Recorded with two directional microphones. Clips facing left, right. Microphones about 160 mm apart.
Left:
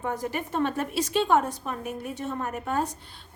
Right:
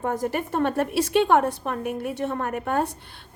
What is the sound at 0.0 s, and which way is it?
A woman's voice, 50° right (ahead or behind).